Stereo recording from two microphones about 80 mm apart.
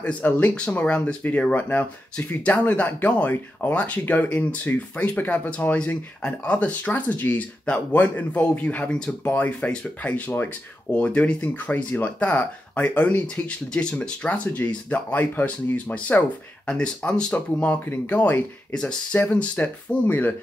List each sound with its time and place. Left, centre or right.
0.0 s speech: centre